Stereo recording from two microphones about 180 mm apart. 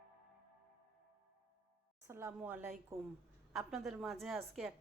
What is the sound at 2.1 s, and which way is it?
Speech, 15° right (ahead or behind).